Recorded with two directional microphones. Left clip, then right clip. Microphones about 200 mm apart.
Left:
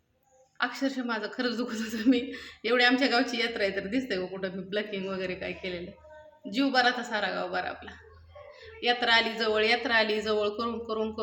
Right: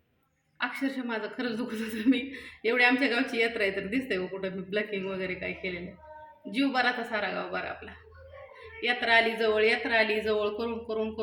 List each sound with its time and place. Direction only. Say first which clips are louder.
0.6 s a woman's voice: left 2 dB; 15° left (ahead or behind)
8.8 s a woman's voice: even; 15° left (ahead or behind)